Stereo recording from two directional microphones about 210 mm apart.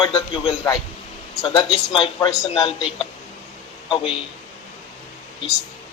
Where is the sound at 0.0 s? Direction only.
25° left (ahead or behind).